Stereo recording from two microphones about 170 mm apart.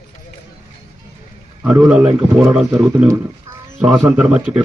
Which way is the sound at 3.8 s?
5° right (ahead or behind).